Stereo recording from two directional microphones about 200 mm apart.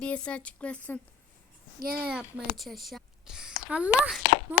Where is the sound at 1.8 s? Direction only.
50° right (ahead or behind).